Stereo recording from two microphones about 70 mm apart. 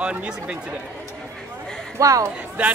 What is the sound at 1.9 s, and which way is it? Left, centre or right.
Speech, right.